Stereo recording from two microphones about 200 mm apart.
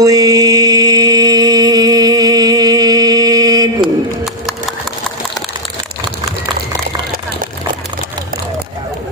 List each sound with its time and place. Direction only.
0.0 s music: 15° right (ahead or behind)